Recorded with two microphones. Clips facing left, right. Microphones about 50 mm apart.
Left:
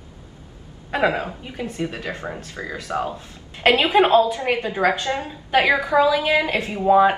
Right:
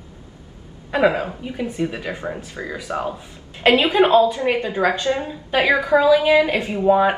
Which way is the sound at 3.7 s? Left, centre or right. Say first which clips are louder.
Even; left.